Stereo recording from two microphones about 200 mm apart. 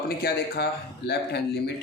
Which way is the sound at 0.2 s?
50° left (ahead or behind).